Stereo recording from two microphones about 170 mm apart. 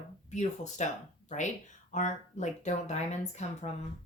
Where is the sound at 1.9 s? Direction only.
45° left (ahead or behind).